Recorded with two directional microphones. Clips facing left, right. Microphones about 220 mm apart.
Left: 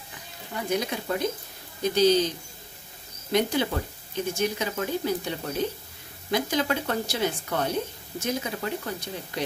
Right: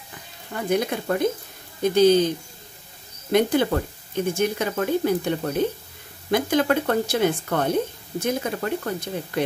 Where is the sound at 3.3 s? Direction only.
55° right (ahead or behind).